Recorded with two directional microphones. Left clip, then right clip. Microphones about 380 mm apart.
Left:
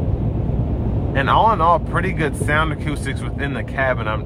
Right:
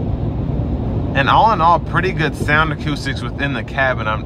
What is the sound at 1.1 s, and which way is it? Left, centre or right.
Speech, centre.